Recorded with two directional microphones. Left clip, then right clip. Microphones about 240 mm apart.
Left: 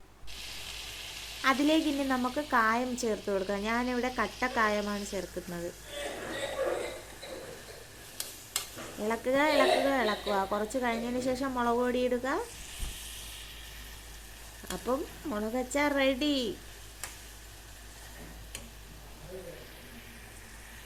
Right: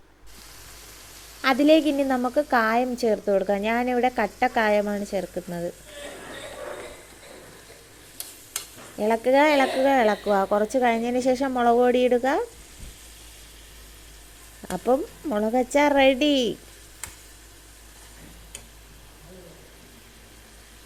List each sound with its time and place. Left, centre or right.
1.4 s a woman's voice: centre
9.0 s a woman's voice: right
14.7 s a woman's voice: right